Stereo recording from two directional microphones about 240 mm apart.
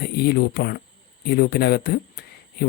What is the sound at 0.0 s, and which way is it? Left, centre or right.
Speech, left.